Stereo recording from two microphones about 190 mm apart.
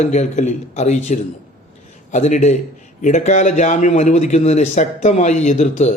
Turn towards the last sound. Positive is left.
turn(degrees=40)  # may be behind; listen again after turning